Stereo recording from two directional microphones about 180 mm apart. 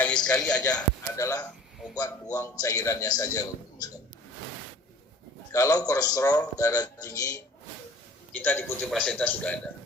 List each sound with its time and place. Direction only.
0.0 s a man's voice: 5° left (ahead or behind)
1.1 s a man's voice: 20° left (ahead or behind)
5.5 s a man's voice: 20° left (ahead or behind)